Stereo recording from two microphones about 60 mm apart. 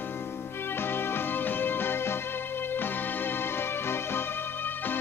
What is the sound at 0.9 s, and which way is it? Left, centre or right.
Music, left.